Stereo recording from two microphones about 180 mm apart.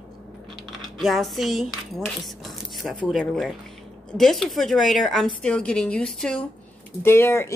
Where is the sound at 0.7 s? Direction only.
Centre (ahead or behind).